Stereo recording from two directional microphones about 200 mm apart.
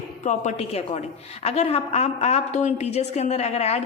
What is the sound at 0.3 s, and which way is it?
A woman's voice, 35° left (ahead or behind).